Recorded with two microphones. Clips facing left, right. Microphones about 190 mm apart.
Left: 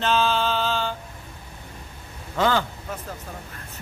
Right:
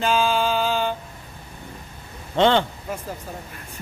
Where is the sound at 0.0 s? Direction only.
10° right (ahead or behind).